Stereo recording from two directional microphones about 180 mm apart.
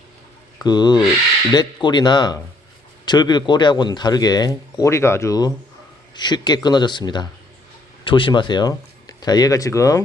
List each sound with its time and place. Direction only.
0.6 s speech: 25° left (ahead or behind)